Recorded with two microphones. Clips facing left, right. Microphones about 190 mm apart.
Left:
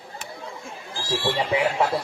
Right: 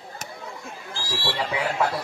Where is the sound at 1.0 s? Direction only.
20° left (ahead or behind).